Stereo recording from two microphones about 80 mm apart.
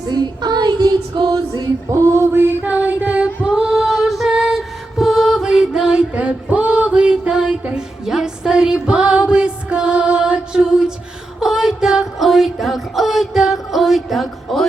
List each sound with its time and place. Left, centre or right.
0.0 s female singing: right
1.9 s music: right
2.6 s music: centre
11.3 s a sound: centre